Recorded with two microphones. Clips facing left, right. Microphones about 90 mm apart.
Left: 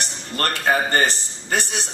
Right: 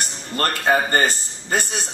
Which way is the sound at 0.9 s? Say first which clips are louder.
Right 1 dB; 40° right (ahead or behind).